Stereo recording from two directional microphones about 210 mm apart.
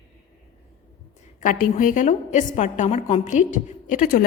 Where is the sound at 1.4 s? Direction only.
40° left (ahead or behind).